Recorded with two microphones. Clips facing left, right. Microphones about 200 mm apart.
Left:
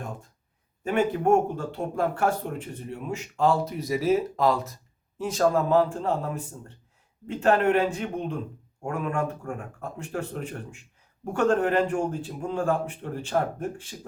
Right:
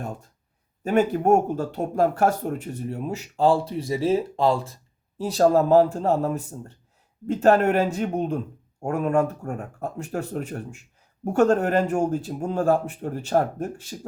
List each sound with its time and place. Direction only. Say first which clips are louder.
0.9 s speech: right 3 dB; 40° right (ahead or behind)